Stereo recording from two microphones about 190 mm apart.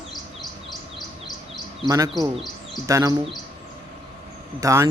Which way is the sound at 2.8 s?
20° right (ahead or behind).